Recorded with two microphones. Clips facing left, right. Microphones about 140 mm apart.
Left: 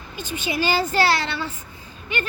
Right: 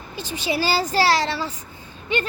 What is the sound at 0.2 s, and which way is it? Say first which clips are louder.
Speech: right 1 dB; 35° right (ahead or behind).